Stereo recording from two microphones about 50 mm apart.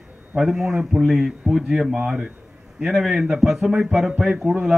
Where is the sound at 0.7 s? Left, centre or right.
Centre.